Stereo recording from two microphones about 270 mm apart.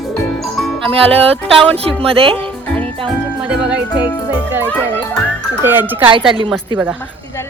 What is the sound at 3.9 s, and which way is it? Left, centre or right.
Speech, centre.